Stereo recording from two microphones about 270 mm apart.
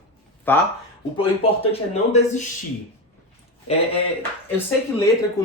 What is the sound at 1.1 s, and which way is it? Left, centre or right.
Speech, centre.